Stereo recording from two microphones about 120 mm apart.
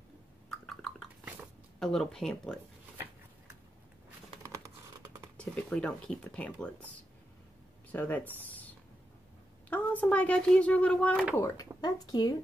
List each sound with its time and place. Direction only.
0.5 s a sound: 5° left (ahead or behind)
1.8 s speech: 5° left (ahead or behind)
5.4 s speech: 10° left (ahead or behind)
7.9 s speech: 15° left (ahead or behind)
9.7 s speech: 15° left (ahead or behind)
11.3 s speech: 25° left (ahead or behind)